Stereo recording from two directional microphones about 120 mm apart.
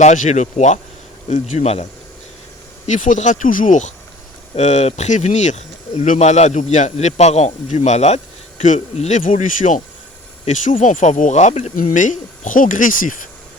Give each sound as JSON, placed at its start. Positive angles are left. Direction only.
{"t": 0.0, "sound": "speech", "side_deg": 85}
{"t": 1.3, "sound": "speech", "side_deg": 65}
{"t": 2.8, "sound": "speech", "side_deg": 90}
{"t": 4.5, "sound": "speech", "side_deg": 70}